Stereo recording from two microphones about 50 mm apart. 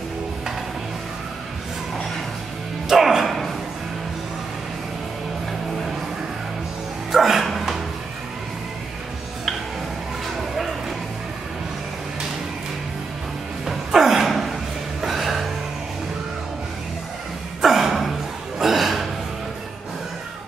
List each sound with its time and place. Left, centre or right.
2.9 s music: centre
7.1 s dog: centre
10.2 s a sound: centre
13.7 s dog: centre
15.0 s music: centre
17.6 s a sound: centre